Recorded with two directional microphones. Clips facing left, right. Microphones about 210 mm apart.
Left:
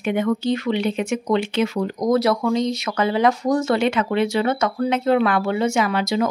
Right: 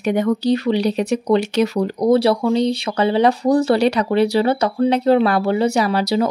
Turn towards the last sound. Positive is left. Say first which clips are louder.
# right 3 dB
turn(degrees=-35)  # may be behind; listen again after turning